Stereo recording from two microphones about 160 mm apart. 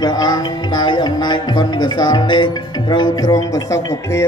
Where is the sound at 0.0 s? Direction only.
25° left (ahead or behind).